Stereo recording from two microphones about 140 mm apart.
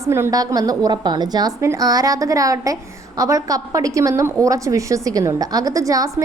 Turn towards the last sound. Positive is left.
turn(degrees=-25)  # may be behind; listen again after turning